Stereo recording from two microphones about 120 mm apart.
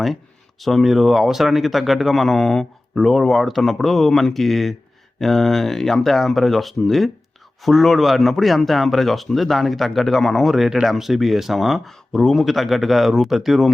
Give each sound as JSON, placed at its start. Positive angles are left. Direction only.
{"t": 0.6, "sound": "a man's voice", "side_deg": 0}